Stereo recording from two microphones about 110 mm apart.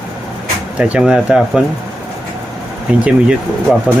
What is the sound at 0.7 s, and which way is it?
Speech, 10° right (ahead or behind).